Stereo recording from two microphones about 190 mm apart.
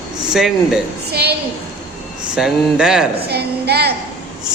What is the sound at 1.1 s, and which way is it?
Speech, 55° right (ahead or behind).